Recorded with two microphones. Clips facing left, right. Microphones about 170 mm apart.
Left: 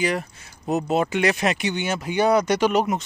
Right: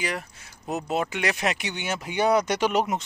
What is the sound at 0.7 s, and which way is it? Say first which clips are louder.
Speech: left 6 dB; 30° left (ahead or behind).